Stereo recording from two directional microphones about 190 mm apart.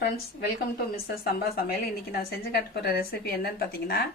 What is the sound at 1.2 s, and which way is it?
A woman's voice, 55° left (ahead or behind).